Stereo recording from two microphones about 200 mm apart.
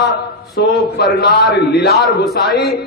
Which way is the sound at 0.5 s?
50° left (ahead or behind).